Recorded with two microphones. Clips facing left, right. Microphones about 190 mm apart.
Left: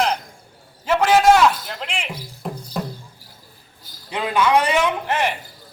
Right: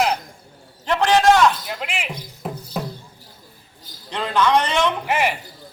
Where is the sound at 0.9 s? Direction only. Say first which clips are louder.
Left 1 dB; 5° left (ahead or behind).